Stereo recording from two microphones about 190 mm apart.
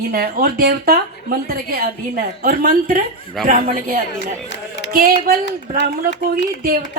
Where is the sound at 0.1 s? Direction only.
50° right (ahead or behind).